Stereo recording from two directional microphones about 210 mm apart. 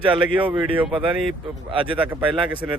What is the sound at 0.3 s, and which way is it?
Speech, 10° right (ahead or behind).